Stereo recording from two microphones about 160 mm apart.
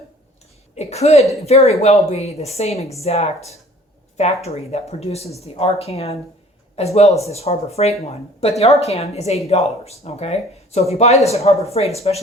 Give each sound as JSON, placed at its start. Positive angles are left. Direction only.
{"t": 0.8, "sound": "a woman's voice", "side_deg": 40}
{"t": 4.4, "sound": "speech", "side_deg": 40}